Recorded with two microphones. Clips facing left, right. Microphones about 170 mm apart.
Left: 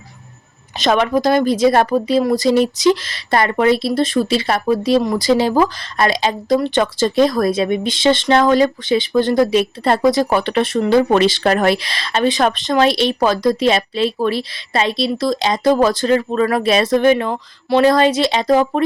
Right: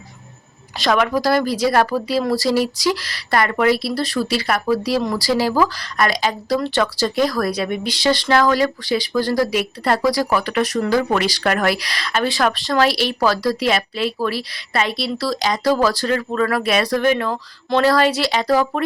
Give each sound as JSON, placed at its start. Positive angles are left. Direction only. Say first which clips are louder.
{"t": 0.8, "sound": "speech", "louder": "left 3 dB", "side_deg": 25}